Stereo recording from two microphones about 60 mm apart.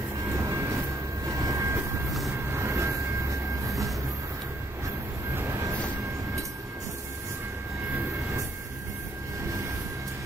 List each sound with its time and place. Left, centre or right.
0.4 s vehicle: right
5.3 s vehicle: right